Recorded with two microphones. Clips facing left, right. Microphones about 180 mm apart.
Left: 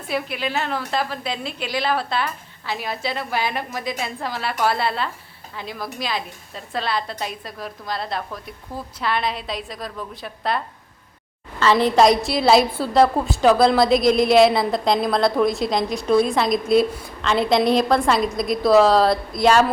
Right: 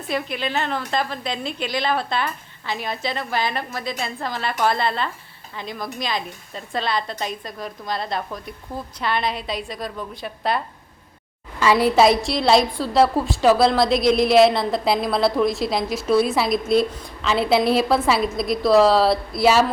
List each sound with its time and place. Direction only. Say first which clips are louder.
0.1 s a woman's voice: even; 5° left (ahead or behind)
11.6 s a woman's voice: even; 10° right (ahead or behind)